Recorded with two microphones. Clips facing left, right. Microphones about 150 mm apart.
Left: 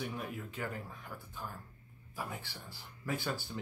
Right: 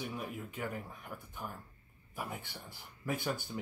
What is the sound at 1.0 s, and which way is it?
Speech, 20° right (ahead or behind).